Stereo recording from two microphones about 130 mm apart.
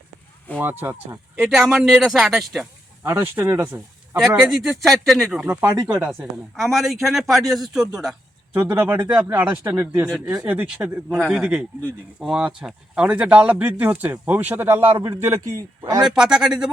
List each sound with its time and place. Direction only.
0.6 s speech: 15° right (ahead or behind)
1.5 s a man's voice: centre (ahead or behind)
3.0 s speech: 20° right (ahead or behind)
4.2 s a man's voice: centre (ahead or behind)
5.4 s a man's voice: 15° right (ahead or behind)
8.5 s speech: 15° right (ahead or behind)
9.4 s a man's voice: 20° right (ahead or behind)
16.0 s a man's voice: 5° right (ahead or behind)